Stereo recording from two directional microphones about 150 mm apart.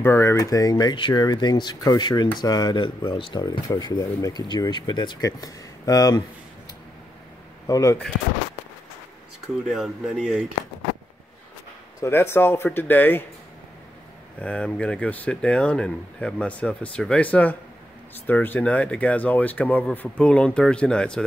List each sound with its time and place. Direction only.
0.0 s speech: 15° left (ahead or behind)
7.6 s speech: 20° left (ahead or behind)
9.7 s speech: centre (ahead or behind)
12.0 s speech: 15° left (ahead or behind)
14.4 s speech: 10° left (ahead or behind)